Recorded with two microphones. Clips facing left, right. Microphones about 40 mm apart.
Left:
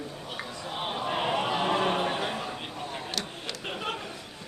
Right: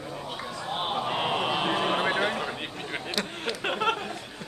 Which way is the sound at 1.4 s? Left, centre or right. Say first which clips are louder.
Right 1 dB; right.